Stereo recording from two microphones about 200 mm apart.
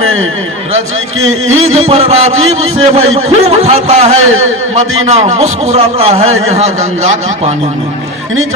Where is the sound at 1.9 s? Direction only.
30° right (ahead or behind).